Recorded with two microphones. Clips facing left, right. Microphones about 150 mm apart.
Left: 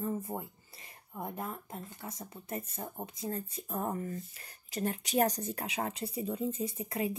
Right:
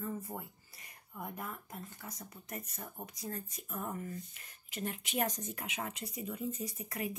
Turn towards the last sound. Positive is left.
turn(degrees=30)  # may be behind; listen again after turning